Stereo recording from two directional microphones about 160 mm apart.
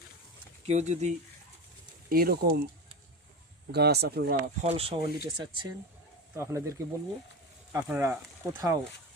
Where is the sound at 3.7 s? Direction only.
90° right.